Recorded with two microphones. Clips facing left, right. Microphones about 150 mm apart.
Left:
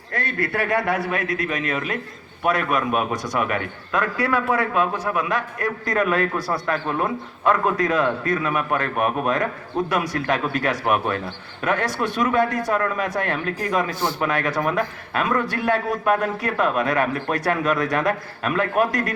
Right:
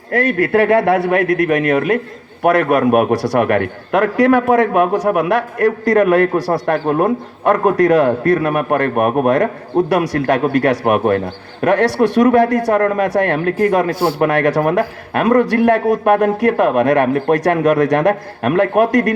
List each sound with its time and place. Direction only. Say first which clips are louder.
0.1 s a man's voice: right 11 dB; 90° right; by 2.0 s 65° right (ahead or behind)
2.4 s a man's voice: right 9 dB; 80° right
2.8 s a man's voice: right 10 dB; 65° right (ahead or behind); by 6.5 s 85° right
6.5 s a man's voice: right 8 dB; 60° right (ahead or behind)
9.9 s a man's voice: right 8 dB; 80° right
10.2 s a man's voice: right 9 dB; 65° right (ahead or behind)
11.6 s a man's voice: right 10 dB; 75° right (ahead or behind)
12.7 s a man's voice: right 9 dB; 60° right (ahead or behind); by 14.7 s 85° right
14.8 s a man's voice: right 7 dB; 70° right (ahead or behind); by 17.1 s 90° right
17.2 s a man's voice: right 9 dB; 75° right (ahead or behind)
18.8 s speech: right 7 dB; 90° right